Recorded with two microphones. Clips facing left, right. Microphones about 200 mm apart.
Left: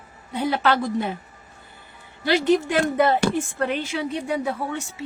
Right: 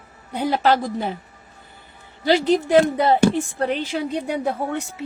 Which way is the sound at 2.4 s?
35° right (ahead or behind).